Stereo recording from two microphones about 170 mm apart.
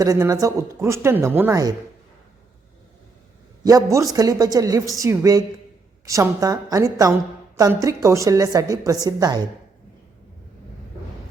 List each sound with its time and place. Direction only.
0.0 s speech: 20° right (ahead or behind)
3.6 s a woman's voice: 20° right (ahead or behind)